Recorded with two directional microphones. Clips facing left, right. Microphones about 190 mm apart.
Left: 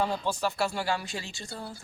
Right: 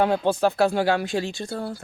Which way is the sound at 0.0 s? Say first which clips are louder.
Right 9 dB; 65° right (ahead or behind).